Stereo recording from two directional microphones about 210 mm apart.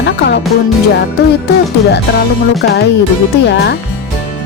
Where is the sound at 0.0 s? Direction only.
50° left (ahead or behind).